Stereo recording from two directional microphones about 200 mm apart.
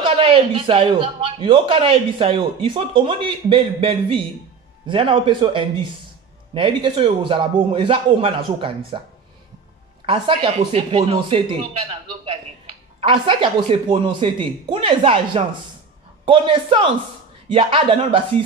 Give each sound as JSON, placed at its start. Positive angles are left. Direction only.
{"t": 0.0, "sound": "a man's voice", "side_deg": -25}
{"t": 10.0, "sound": "a man's voice", "side_deg": -25}